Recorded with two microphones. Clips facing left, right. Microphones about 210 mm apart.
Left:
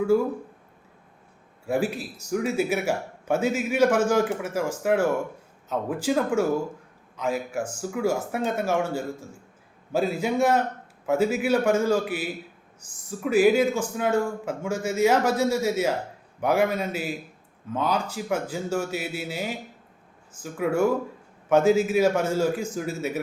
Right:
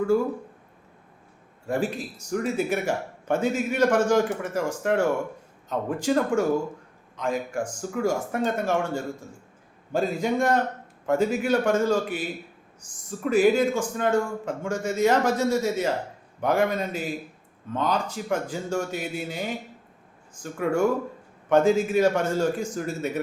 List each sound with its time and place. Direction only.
1.6 s a man's voice: 10° left (ahead or behind)